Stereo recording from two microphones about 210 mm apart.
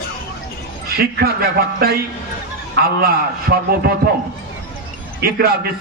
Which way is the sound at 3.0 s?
45° right (ahead or behind).